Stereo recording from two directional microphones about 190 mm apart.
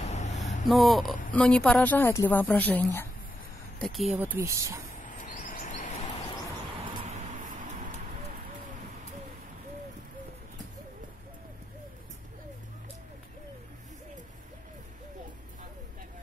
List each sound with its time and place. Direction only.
0.1 s a sound: 35° left (ahead or behind)
0.7 s a woman's voice: centre (ahead or behind)
3.8 s speech: centre (ahead or behind)
5.0 s chirp: 45° left (ahead or behind)